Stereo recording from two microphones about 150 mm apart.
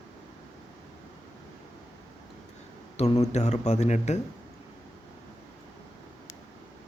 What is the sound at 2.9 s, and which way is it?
Speech, 45° left (ahead or behind).